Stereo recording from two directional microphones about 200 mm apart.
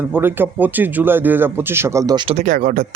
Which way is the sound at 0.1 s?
10° right (ahead or behind).